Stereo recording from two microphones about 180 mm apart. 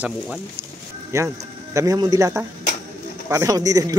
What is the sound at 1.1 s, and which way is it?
A man's voice, 15° right (ahead or behind).